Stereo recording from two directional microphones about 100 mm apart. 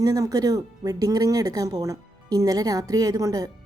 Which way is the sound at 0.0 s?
35° right (ahead or behind).